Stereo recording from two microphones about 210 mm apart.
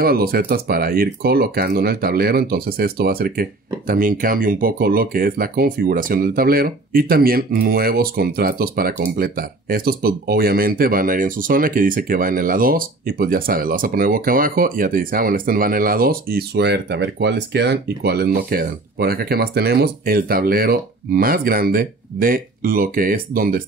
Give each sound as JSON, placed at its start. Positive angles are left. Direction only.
{"t": 0.0, "sound": "speech", "side_deg": -45}